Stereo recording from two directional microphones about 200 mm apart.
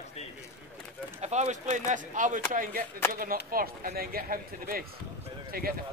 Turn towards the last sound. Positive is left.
turn(degrees=-50)  # may be behind; listen again after turning